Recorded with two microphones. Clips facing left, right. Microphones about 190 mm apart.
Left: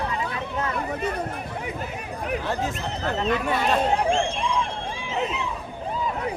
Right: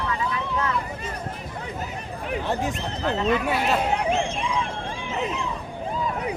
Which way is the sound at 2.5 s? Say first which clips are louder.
Right 4 dB; 15° right (ahead or behind).